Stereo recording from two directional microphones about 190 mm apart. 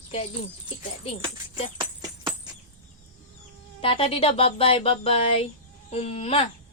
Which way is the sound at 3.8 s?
30° left (ahead or behind).